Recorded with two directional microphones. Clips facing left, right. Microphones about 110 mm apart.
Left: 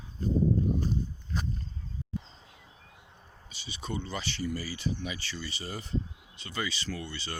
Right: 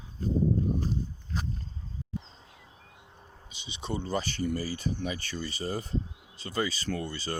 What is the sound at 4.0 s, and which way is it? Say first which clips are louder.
Speech: right 4 dB; 40° right (ahead or behind).